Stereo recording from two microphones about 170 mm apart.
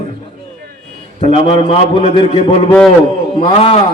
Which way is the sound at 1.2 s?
35° left (ahead or behind).